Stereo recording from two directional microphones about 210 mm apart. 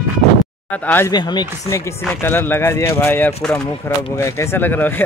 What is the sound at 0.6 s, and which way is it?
Speech, 10° left (ahead or behind).